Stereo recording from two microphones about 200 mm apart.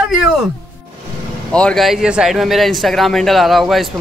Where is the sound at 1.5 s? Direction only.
5° left (ahead or behind).